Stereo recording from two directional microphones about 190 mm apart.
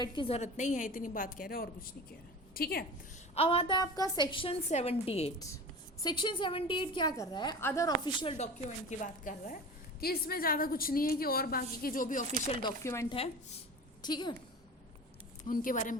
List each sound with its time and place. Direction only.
0.0 s a woman's voice: 30° left (ahead or behind); by 2.8 s 50° left (ahead or behind)
3.3 s a woman's voice: 30° left (ahead or behind)
8.9 s speech: 40° left (ahead or behind)
10.0 s a woman's voice: 55° left (ahead or behind)
12.6 s a woman's voice: 15° left (ahead or behind)
15.4 s a woman's voice: 45° left (ahead or behind)